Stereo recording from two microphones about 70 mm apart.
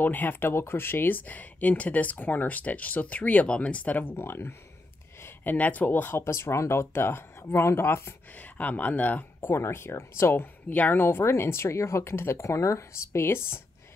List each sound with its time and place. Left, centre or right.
0.0 s speech: left
5.2 s speech: left
8.4 s speech: left
9.4 s speech: left